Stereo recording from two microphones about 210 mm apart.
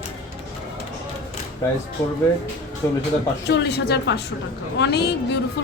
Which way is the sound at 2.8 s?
15° left (ahead or behind).